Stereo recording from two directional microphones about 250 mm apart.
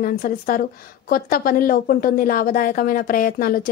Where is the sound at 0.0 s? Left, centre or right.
Left.